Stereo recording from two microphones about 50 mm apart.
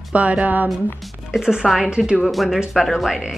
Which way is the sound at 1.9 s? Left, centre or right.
Centre.